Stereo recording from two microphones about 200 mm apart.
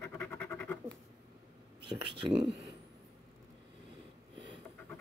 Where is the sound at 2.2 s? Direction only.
30° right (ahead or behind).